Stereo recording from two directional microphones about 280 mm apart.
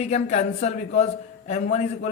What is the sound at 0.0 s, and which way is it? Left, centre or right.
A man's voice, left.